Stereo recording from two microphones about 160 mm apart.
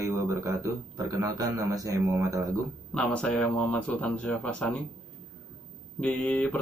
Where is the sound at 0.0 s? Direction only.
20° right (ahead or behind).